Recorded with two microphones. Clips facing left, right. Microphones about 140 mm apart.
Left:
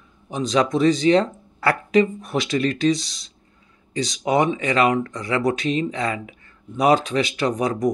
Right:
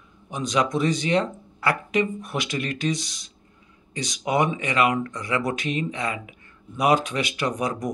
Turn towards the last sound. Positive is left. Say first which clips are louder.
# left 5 dB
turn(degrees=25)  # may be behind; listen again after turning